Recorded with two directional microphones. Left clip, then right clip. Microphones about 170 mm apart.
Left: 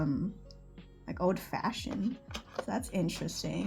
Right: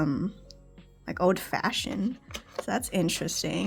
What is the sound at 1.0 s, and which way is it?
Speech, 40° right (ahead or behind).